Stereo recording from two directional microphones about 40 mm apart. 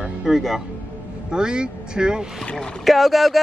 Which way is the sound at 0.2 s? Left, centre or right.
Centre.